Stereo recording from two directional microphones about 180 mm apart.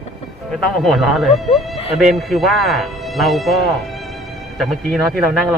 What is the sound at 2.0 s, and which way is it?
Speech, centre (ahead or behind).